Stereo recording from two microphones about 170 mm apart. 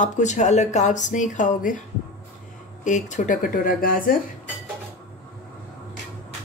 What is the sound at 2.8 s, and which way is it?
Speech, 45° left (ahead or behind).